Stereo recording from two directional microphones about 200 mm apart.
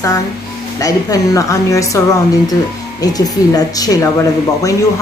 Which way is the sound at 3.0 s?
20° left (ahead or behind).